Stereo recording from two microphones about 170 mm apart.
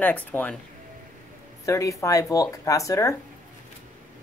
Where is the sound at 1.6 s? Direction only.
20° left (ahead or behind).